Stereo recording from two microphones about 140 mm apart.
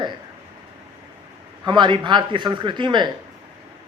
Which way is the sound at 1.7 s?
35° right (ahead or behind).